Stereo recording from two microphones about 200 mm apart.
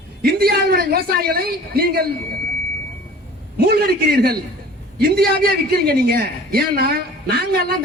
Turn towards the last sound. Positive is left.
turn(degrees=-50)  # may be behind; listen again after turning